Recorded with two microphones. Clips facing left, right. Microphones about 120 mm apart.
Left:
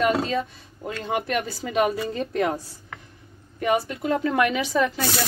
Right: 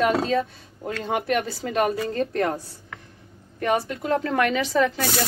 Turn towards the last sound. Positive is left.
turn(degrees=10)  # may be behind; listen again after turning